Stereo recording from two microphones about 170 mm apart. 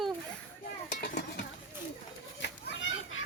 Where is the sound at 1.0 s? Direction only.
65° left (ahead or behind).